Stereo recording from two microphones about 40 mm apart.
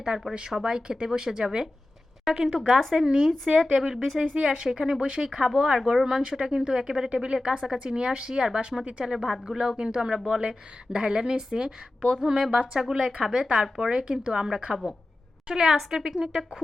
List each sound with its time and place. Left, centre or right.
0.1 s speech: right; by 4.2 s centre
4.4 s speech: centre
7.5 s speech: centre
7.9 s speech: right
8.8 s speech: right
9.1 s a woman's voice: centre